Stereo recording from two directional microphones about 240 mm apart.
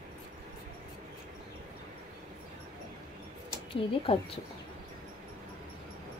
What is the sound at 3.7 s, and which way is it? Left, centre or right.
Speech, left.